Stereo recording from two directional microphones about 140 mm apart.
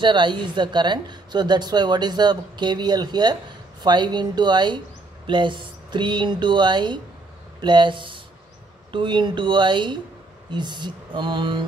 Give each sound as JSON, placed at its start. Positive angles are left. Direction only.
{"t": 0.0, "sound": "a woman's voice", "side_deg": -35}